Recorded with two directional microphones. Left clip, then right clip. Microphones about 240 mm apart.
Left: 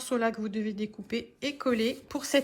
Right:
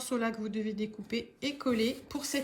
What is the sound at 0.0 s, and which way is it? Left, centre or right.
Speech, centre.